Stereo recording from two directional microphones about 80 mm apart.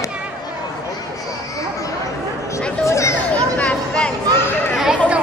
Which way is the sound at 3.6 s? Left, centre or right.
Centre.